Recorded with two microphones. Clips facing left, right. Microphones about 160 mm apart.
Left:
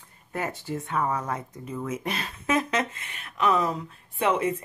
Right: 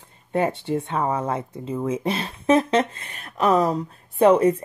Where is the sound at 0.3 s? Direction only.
25° right (ahead or behind).